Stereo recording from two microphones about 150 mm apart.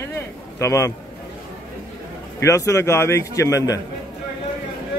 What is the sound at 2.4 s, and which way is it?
Speech, 20° left (ahead or behind).